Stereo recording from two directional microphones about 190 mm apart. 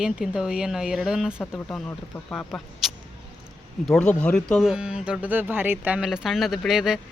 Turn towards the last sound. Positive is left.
turn(degrees=-5)  # may be behind; listen again after turning